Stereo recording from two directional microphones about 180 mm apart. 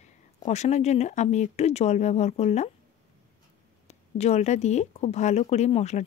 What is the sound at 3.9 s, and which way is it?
Speech, 40° left (ahead or behind).